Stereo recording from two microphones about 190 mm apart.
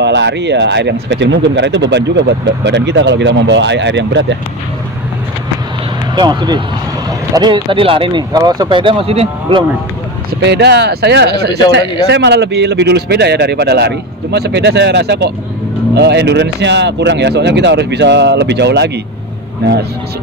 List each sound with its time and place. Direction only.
0.0 s speech: 65° right (ahead or behind)
6.1 s speech: 25° right (ahead or behind)
10.4 s speech: 60° right (ahead or behind)